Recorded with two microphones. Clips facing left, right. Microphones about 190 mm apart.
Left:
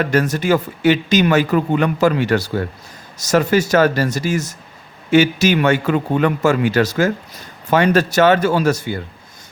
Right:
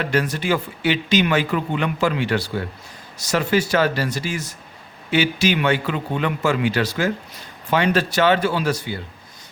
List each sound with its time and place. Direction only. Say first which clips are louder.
0.0 s speech: left 5 dB; 45° left (ahead or behind)